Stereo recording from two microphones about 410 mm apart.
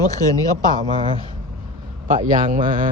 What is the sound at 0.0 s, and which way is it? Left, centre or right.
Speech, centre.